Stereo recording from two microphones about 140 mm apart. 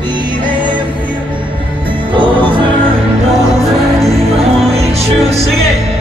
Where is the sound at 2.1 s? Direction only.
35° right (ahead or behind).